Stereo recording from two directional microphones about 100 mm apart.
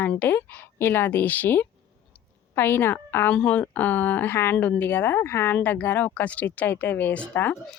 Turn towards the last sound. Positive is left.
turn(degrees=15)  # may be behind; listen again after turning